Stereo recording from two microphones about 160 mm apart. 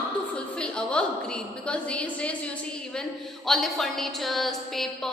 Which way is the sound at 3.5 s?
Centre (ahead or behind).